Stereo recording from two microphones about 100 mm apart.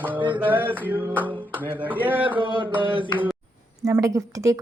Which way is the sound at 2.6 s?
55° right (ahead or behind).